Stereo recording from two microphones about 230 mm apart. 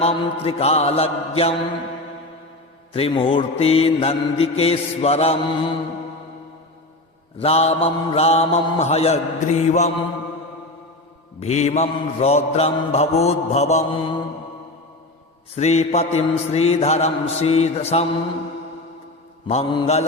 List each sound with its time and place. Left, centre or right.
0.0 s mantra: left
2.9 s mantra: left
7.3 s mantra: left
11.3 s mantra: left
15.5 s mantra: left
19.5 s mantra: left